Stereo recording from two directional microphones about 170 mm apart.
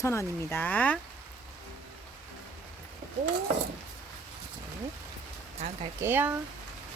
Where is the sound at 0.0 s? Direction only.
15° left (ahead or behind).